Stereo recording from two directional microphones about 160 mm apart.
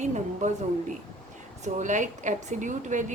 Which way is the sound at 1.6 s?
50° right (ahead or behind).